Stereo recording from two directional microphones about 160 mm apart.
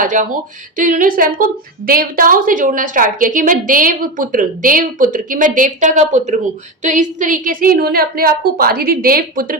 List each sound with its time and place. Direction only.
0.0 s a woman's voice: 55° right (ahead or behind)